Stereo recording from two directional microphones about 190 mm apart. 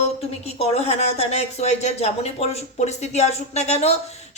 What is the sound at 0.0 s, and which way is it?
A woman's voice, 35° left (ahead or behind).